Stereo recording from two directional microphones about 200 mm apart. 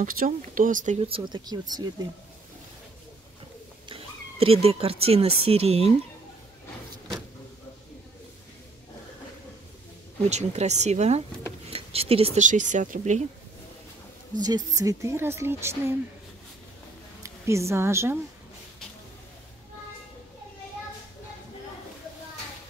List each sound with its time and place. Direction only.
0.0 s speech: 40° right (ahead or behind); by 2.0 s 20° right (ahead or behind)
3.9 s speech: 30° right (ahead or behind)
10.3 s speech: 35° right (ahead or behind)
14.4 s speech: 20° right (ahead or behind)
17.2 s speech: 15° right (ahead or behind)